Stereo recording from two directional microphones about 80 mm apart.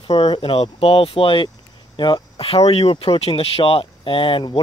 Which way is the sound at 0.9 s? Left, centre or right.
Left.